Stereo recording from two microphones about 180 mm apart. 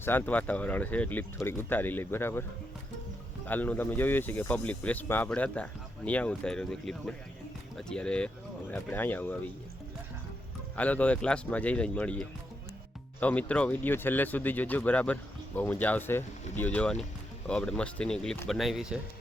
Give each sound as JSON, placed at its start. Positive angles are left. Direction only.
{"t": 0.0, "sound": "speech", "side_deg": 10}
{"t": 3.4, "sound": "speech", "side_deg": 10}
{"t": 10.8, "sound": "speech", "side_deg": 10}